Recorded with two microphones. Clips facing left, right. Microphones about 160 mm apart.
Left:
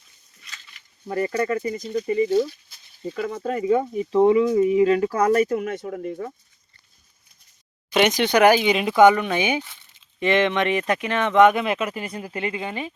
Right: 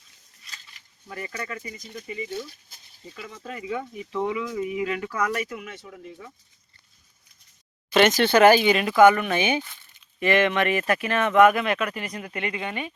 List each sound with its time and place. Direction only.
0.4 s a sound: 35° right (ahead or behind)
1.0 s speech: 40° left (ahead or behind)
7.9 s speech: 15° left (ahead or behind)